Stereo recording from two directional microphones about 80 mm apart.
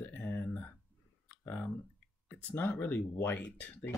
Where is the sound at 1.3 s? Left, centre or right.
Left.